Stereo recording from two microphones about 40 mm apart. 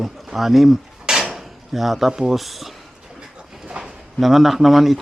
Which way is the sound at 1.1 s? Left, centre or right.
Centre.